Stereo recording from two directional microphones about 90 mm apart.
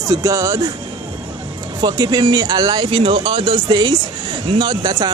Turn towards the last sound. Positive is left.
turn(degrees=-50)  # may be behind; listen again after turning